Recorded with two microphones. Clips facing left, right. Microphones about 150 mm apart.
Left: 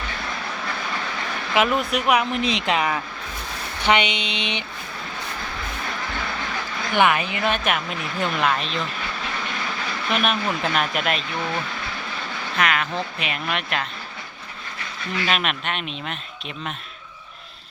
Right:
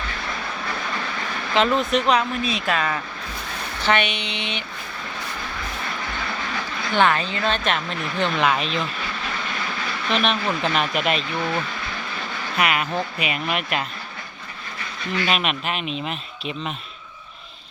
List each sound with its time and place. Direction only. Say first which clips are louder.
1.5 s a woman's voice: right 2 dB; 10° left (ahead or behind)
6.9 s a woman's voice: even; 15° left (ahead or behind); by 8.8 s centre (ahead or behind)
10.1 s speech: right 1 dB; 5° left (ahead or behind)
12.5 s speech: right 1 dB; 5° right (ahead or behind)
15.3 s speech: even; centre (ahead or behind)